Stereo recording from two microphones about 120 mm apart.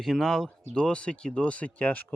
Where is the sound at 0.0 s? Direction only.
Centre (ahead or behind).